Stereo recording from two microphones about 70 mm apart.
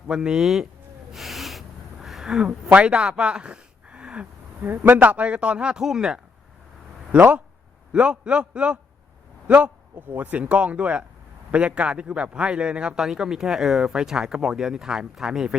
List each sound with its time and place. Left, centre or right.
0.1 s a man's voice: centre
1.1 s a sound: centre
4.6 s a man's voice: right; by 6.1 s centre
7.1 s a man's voice: right
10.1 s a man's voice: right; by 15.5 s centre